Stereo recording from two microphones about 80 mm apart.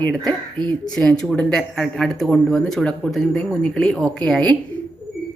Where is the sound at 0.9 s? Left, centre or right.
Centre.